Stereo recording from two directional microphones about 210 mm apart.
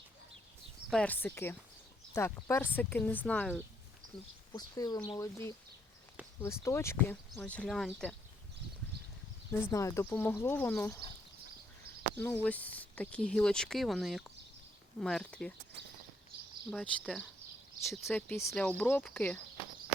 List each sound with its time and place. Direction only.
0.9 s speech: 5° left (ahead or behind)
4.5 s speech: 20° left (ahead or behind); by 8.1 s centre (ahead or behind)
9.5 s speech: 15° left (ahead or behind)
12.1 s speech: 10° left (ahead or behind)
16.7 s speech: centre (ahead or behind)
18.0 s speech: 10° left (ahead or behind)